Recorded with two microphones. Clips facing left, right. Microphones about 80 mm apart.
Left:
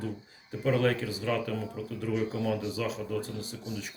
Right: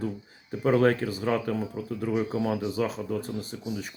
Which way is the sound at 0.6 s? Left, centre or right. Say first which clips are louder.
Right 5 dB; right.